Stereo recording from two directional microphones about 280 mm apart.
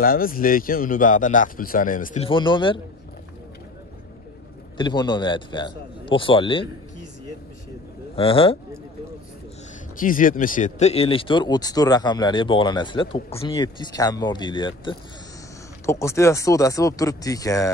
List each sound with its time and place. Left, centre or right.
0.0 s a man's voice: left
4.7 s speech: centre
8.2 s a man's voice: centre
9.9 s speech: left; by 17.7 s centre